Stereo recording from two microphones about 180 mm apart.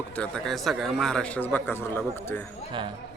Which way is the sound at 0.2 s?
5° left (ahead or behind).